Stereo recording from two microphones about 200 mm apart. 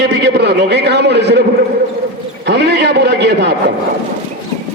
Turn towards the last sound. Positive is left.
turn(degrees=-55)  # may be behind; listen again after turning